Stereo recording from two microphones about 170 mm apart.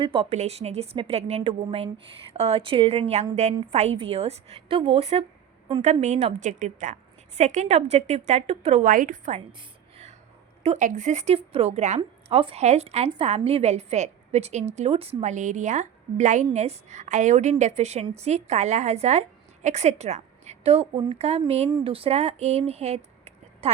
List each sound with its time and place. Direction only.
0.0 s a woman's voice: 35° right (ahead or behind)
8.8 s a woman's voice: 50° right (ahead or behind)
9.5 s a sound: 30° right (ahead or behind)
10.6 s a woman's voice: 40° right (ahead or behind)